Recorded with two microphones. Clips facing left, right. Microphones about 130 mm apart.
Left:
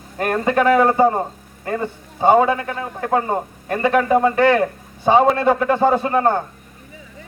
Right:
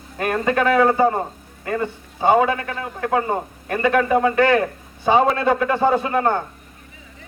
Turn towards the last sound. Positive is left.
turn(degrees=35)  # may be behind; listen again after turning